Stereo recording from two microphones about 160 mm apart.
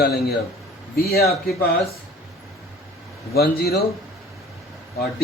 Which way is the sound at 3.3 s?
75° left (ahead or behind).